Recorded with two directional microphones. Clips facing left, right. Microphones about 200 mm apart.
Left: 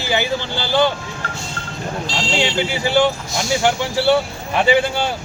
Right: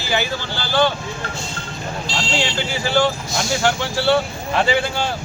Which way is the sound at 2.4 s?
20° left (ahead or behind).